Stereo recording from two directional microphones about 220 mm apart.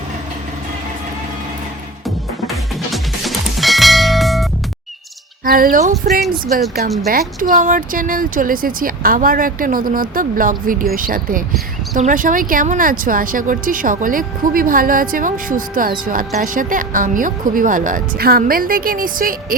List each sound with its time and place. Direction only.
2.0 s music: centre (ahead or behind)
5.7 s speech: 40° right (ahead or behind)